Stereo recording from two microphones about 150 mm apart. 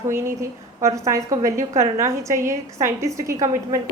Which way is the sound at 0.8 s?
20° right (ahead or behind).